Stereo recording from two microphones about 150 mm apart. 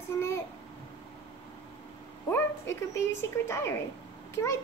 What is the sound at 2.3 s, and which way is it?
A woman's voice, 20° left (ahead or behind).